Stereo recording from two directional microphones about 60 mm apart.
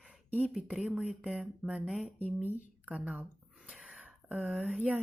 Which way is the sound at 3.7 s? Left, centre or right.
Centre.